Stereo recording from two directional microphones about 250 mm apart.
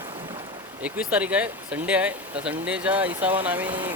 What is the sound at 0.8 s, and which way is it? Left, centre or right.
Speech, centre.